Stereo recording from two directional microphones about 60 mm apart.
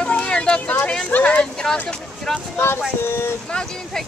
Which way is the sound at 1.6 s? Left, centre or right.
Centre.